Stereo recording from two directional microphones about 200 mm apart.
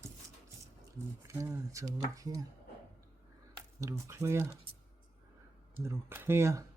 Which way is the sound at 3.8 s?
15° right (ahead or behind).